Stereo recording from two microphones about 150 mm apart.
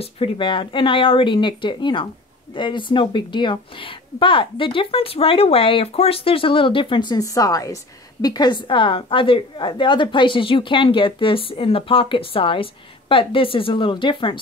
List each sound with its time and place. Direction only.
0.0 s a woman's voice: 35° left (ahead or behind)